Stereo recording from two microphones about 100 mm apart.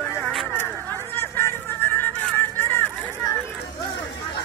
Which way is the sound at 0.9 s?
25° left (ahead or behind).